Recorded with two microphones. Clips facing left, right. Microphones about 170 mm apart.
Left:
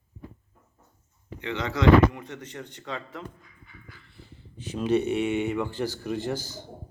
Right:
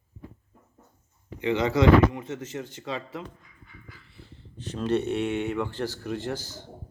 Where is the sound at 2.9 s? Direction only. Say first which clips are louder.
Right 1 dB; 10° right (ahead or behind).